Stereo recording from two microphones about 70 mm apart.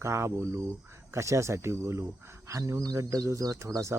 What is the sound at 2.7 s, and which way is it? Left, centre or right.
Speech, right.